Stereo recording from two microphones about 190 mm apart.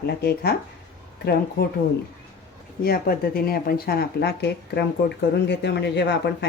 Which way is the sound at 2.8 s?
55° left (ahead or behind).